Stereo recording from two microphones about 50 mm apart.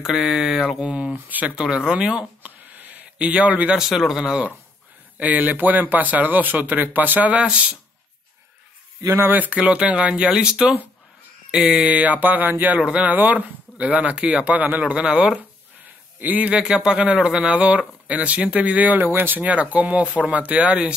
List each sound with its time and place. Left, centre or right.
0.0 s speech: centre
1.1 s speech: right
1.9 s a man's voice: centre
2.6 s a sound: right
3.2 s a man's voice: right
3.7 s speech: centre
5.1 s speech: right
9.3 s speech: right
9.6 s a man's voice: right
14.5 s a man's voice: right
15.8 s a man's voice: right
19.0 s speech: right
19.4 s a man's voice: right